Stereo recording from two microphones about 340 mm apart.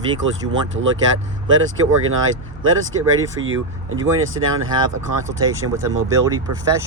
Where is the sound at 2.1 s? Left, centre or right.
Right.